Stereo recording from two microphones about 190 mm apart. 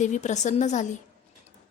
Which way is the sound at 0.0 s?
40° left (ahead or behind).